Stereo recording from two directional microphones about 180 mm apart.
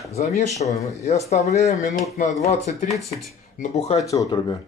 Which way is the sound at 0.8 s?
35° left (ahead or behind).